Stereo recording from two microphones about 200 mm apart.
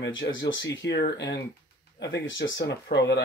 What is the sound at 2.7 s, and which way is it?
Speech, 55° left (ahead or behind).